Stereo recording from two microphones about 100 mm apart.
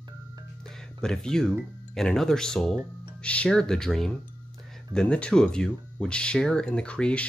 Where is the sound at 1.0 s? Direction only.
5° left (ahead or behind).